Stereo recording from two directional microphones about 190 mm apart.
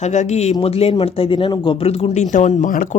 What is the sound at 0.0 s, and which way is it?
Speech, 40° left (ahead or behind).